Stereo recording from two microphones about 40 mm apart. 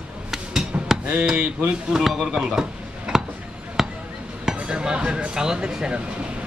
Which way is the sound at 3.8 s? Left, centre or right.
Centre.